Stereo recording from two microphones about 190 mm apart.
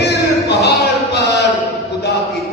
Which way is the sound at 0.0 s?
65° left (ahead or behind).